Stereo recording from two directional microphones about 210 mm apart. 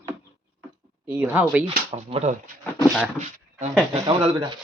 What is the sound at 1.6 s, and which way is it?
Speech, 25° right (ahead or behind).